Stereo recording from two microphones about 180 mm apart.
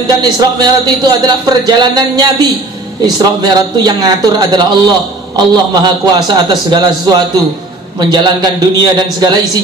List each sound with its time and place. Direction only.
0.0 s a man's voice: 20° right (ahead or behind)